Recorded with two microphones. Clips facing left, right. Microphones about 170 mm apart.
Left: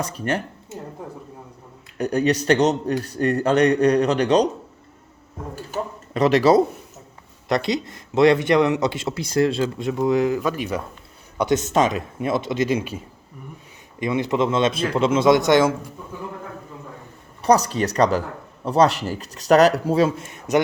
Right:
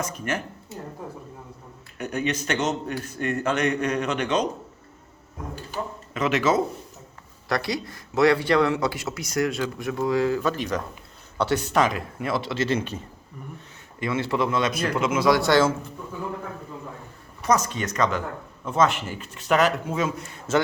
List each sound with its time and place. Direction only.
0.0 s a man's voice: 35° left (ahead or behind)
2.0 s a man's voice: 35° left (ahead or behind)
5.7 s a sound: 35° left (ahead or behind)
7.4 s speech: 20° left (ahead or behind)
14.0 s speech: 20° left (ahead or behind)
17.4 s a man's voice: 35° left (ahead or behind)